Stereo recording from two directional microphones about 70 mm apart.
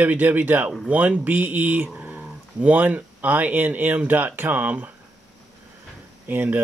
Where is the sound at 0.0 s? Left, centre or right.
Right.